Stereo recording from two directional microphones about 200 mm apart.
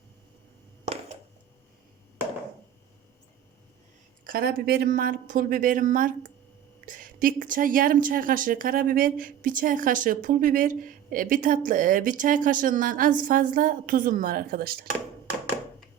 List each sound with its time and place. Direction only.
4.2 s a woman's voice: 50° right (ahead or behind)